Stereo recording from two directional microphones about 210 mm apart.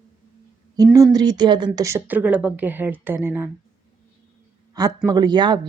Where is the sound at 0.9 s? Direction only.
15° right (ahead or behind).